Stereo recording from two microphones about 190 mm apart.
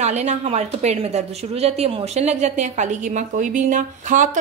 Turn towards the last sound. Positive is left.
turn(degrees=-40)  # may be behind; listen again after turning